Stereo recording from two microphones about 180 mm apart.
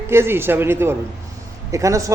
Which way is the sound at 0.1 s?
15° right (ahead or behind).